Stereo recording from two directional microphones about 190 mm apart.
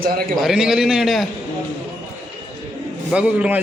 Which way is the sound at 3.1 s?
5° right (ahead or behind).